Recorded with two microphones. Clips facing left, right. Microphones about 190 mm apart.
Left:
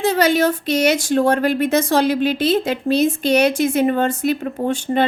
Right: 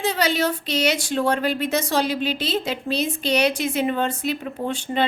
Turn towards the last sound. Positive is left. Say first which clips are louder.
# left 6 dB
turn(degrees=45)  # may be behind; listen again after turning